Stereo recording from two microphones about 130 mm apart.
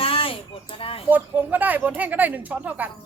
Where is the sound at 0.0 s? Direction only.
45° left (ahead or behind).